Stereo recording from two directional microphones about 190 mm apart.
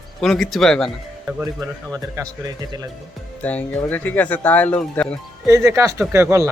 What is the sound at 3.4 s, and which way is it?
Speech, 10° left (ahead or behind).